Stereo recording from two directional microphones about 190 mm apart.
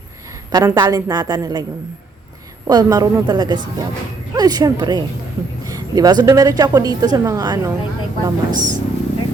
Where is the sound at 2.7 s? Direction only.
20° right (ahead or behind).